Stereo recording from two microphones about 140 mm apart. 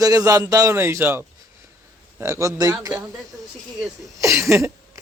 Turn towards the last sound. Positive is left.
turn(degrees=-20)  # may be behind; listen again after turning